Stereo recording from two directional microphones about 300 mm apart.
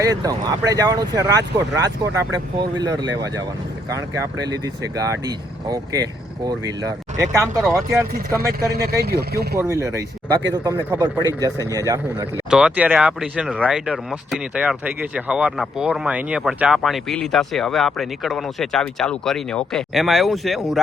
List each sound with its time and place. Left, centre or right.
0.0 s speech: centre
2.6 s speech: centre
4.4 s speech: centre
8.4 s speech: right
9.6 s speech: centre
11.2 s speech: centre
11.7 s speech: centre